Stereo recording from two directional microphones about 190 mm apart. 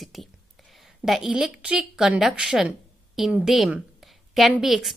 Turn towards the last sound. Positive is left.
turn(degrees=0)  # may be behind; listen again after turning